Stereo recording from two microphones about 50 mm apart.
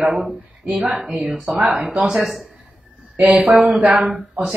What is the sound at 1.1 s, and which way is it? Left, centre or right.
A woman's voice, centre.